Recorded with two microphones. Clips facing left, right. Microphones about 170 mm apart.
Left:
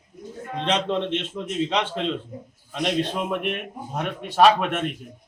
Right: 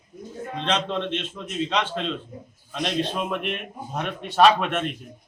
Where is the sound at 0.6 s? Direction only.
15° left (ahead or behind).